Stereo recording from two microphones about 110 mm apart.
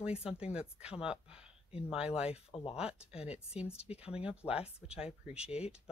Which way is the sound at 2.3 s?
60° left (ahead or behind).